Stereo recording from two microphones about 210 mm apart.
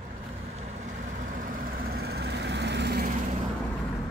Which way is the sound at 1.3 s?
40° right (ahead or behind).